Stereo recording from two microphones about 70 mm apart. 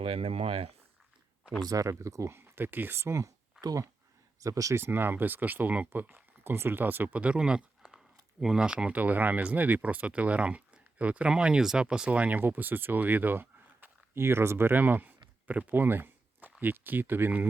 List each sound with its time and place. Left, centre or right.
1.6 s speech: right
4.4 s speech: right
4.7 s speech: right